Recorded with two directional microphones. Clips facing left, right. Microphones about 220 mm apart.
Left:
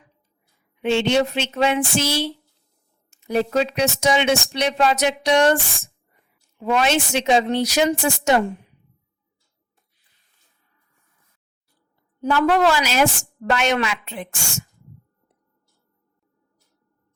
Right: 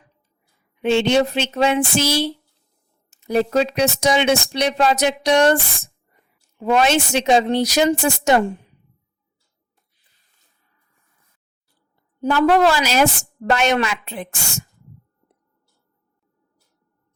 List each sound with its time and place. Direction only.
0.8 s speech: 40° right (ahead or behind)
12.2 s speech: 35° right (ahead or behind)